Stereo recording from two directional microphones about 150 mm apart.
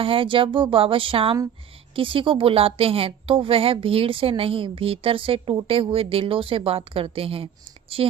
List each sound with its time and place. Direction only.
0.0 s a woman's voice: 35° right (ahead or behind)